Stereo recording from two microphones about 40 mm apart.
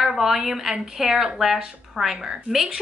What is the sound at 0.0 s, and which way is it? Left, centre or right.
A woman's voice, centre.